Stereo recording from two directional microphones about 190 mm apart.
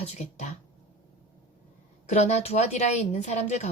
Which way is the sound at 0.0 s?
35° left (ahead or behind).